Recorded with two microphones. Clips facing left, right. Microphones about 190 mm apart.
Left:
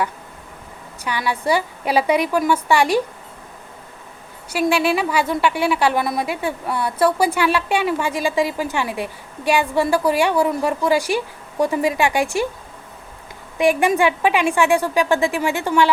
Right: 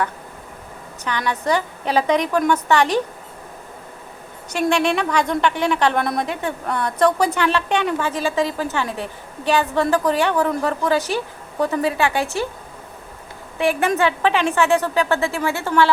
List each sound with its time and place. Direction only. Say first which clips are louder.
1.0 s a woman's voice: left 1 dB; 10° left (ahead or behind)
4.4 s a woman's voice: left 1 dB; 5° left (ahead or behind)
13.6 s a woman's voice: left 2 dB; 15° left (ahead or behind)